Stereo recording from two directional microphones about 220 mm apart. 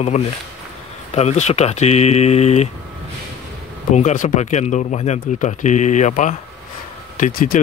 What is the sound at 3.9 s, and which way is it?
Speech, 35° left (ahead or behind).